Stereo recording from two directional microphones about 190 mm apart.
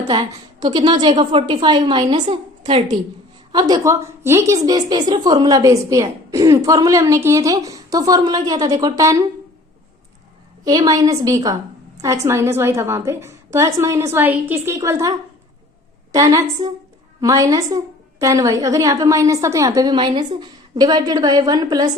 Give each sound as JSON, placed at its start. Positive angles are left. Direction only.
{"t": 0.1, "sound": "a woman's voice", "side_deg": -20}
{"t": 3.5, "sound": "a woman's voice", "side_deg": -20}
{"t": 10.6, "sound": "a woman's voice", "side_deg": -20}
{"t": 16.1, "sound": "a woman's voice", "side_deg": -15}